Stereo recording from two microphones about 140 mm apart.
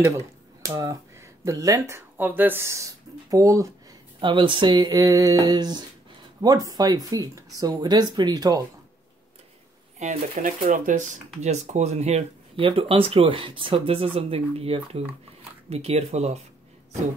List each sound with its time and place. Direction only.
0.0 s speech: 20° right (ahead or behind)
4.2 s a sound: 35° right (ahead or behind)
9.9 s speech: 65° right (ahead or behind)